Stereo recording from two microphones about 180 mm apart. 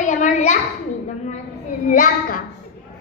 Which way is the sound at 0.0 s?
45° left (ahead or behind).